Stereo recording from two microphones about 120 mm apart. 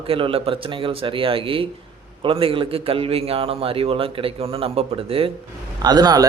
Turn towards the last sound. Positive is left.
turn(degrees=-35)  # may be behind; listen again after turning